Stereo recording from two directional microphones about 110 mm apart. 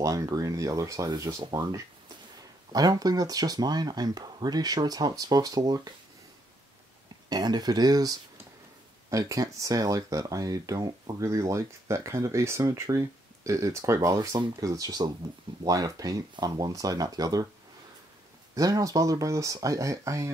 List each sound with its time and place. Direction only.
0.0 s speech: 30° right (ahead or behind)
7.2 s speech: 40° right (ahead or behind)
18.5 s speech: 30° right (ahead or behind)